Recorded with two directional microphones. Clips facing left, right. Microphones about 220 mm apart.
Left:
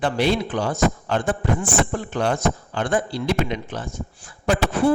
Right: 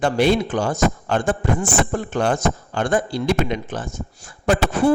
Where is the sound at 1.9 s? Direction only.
45° right (ahead or behind).